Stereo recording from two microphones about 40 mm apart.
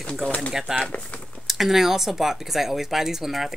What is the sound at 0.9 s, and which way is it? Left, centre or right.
Speech, left.